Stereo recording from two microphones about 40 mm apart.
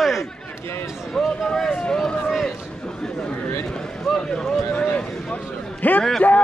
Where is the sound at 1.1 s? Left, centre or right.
Centre.